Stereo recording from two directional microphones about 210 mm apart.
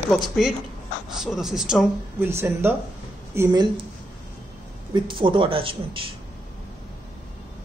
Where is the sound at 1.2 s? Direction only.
Centre (ahead or behind).